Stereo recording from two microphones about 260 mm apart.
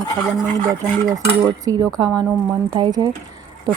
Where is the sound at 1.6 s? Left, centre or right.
Centre.